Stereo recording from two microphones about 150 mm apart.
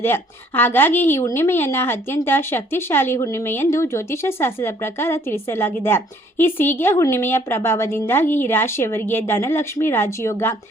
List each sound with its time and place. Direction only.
0.0 s a woman's voice: 15° left (ahead or behind)